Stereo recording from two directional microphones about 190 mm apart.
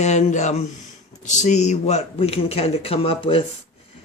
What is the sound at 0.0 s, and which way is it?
A man's voice, 35° left (ahead or behind).